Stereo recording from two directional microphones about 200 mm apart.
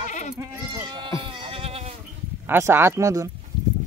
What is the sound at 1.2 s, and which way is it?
Goat, 25° right (ahead or behind).